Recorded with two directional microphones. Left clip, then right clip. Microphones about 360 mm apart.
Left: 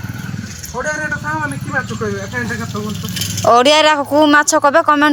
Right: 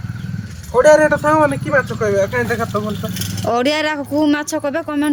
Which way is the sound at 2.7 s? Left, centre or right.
Centre.